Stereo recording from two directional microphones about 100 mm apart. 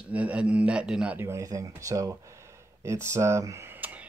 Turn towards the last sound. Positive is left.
turn(degrees=-20)  # may be behind; listen again after turning